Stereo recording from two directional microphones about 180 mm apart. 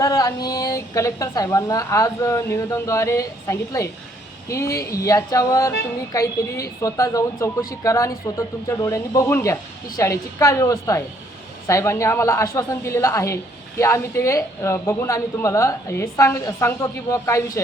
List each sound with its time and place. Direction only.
0.0 s a woman's voice: 20° left (ahead or behind)